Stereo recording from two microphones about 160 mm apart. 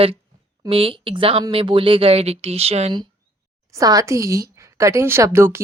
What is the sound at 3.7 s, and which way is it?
A woman's voice, 20° right (ahead or behind).